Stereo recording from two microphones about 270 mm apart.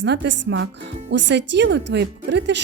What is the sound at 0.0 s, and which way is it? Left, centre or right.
Speech, right.